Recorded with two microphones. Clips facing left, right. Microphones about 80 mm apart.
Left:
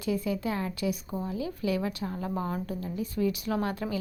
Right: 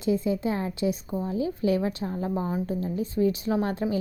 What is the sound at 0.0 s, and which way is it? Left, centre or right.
Speech, right.